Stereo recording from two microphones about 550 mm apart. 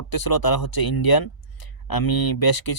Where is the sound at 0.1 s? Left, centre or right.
Left.